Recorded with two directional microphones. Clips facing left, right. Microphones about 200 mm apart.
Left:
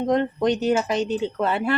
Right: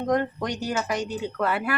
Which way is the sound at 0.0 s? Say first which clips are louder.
Left 4 dB; 25° left (ahead or behind).